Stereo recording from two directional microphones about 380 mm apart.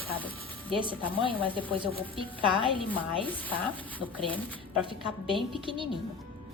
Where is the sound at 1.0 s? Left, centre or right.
Centre.